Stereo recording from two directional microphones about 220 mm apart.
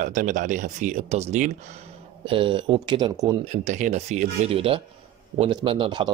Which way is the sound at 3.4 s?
35° right (ahead or behind).